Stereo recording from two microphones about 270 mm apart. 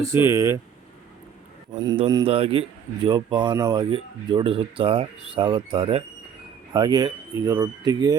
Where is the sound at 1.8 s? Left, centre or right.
Centre.